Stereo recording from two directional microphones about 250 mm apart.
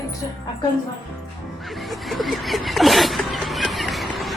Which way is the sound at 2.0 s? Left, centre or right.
Centre.